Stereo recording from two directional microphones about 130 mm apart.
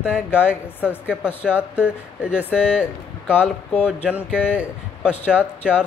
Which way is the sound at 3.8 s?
10° right (ahead or behind).